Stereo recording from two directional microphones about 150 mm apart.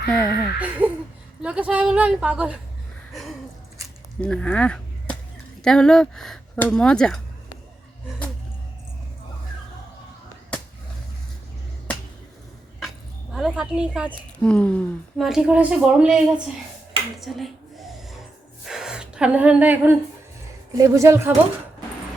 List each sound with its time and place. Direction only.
0.1 s speech: 5° left (ahead or behind)
0.6 s a woman's voice: 10° right (ahead or behind)
3.1 s gasp: centre (ahead or behind)
4.2 s speech: 5° left (ahead or behind)
13.3 s a woman's voice: 5° right (ahead or behind)
14.3 s speech: 5° left (ahead or behind)
15.2 s speech: 5° right (ahead or behind)
17.2 s a sound: centre (ahead or behind)
20.7 s speech: 20° right (ahead or behind)